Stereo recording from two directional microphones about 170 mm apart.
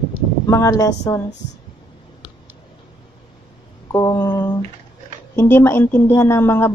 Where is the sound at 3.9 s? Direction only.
20° left (ahead or behind).